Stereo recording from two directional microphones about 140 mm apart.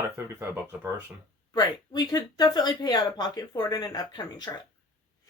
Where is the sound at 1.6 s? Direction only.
30° left (ahead or behind).